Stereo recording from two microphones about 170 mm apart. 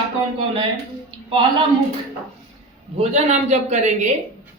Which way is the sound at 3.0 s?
40° right (ahead or behind).